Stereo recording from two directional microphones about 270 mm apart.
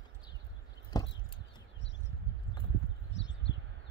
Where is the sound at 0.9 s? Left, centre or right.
Centre.